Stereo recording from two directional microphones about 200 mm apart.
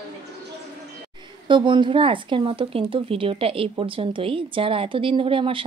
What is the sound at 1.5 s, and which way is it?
Speech, 25° right (ahead or behind).